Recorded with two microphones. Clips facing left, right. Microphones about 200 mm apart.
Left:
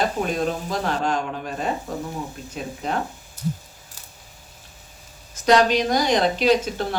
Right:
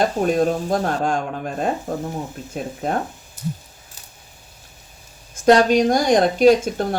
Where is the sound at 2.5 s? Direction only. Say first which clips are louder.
Right 4 dB; 45° right (ahead or behind).